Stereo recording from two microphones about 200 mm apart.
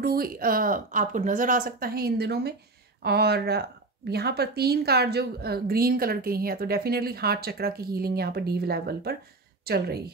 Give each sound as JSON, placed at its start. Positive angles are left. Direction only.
{"t": 0.0, "sound": "a woman's voice", "side_deg": -50}